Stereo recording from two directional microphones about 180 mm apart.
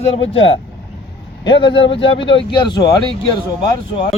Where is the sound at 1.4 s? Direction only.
25° left (ahead or behind).